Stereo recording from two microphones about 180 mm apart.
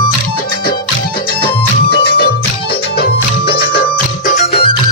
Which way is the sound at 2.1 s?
60° left (ahead or behind).